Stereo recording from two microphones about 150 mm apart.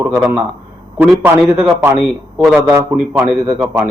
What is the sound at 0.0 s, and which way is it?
A man's voice, 15° right (ahead or behind).